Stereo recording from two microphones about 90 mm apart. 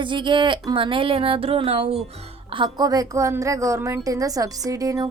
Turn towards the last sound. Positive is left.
turn(degrees=-40)  # may be behind; listen again after turning